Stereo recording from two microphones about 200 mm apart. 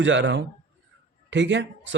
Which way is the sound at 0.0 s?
65° right (ahead or behind).